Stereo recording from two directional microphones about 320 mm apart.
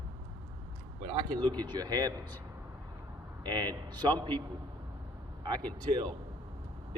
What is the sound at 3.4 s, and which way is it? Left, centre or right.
Speech, centre.